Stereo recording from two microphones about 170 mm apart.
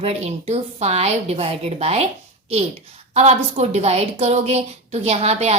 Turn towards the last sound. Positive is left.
turn(degrees=-35)  # may be behind; listen again after turning